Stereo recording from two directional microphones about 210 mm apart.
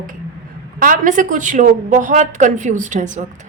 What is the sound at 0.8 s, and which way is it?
A woman's voice, 40° right (ahead or behind).